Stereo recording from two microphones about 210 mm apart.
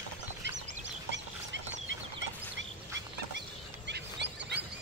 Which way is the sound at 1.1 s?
60° right (ahead or behind).